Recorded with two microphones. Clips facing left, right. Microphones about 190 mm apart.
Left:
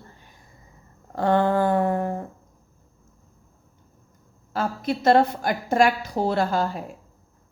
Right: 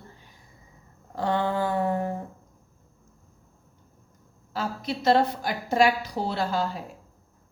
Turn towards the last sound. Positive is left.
turn(degrees=50)  # may be behind; listen again after turning